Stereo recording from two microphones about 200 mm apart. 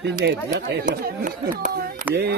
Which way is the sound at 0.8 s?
45° right (ahead or behind).